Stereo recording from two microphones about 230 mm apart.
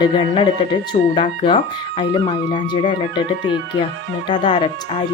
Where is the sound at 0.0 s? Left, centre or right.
Left.